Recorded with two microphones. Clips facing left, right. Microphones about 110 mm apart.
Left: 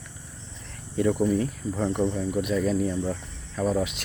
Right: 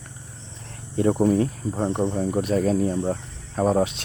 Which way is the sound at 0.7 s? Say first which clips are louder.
Right 3 dB; 35° right (ahead or behind).